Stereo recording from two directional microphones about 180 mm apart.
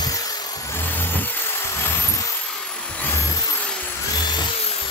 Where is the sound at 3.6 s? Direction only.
10° left (ahead or behind); by 4.8 s 35° left (ahead or behind).